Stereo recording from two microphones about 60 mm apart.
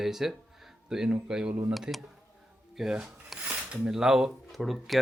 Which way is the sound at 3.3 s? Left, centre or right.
Right.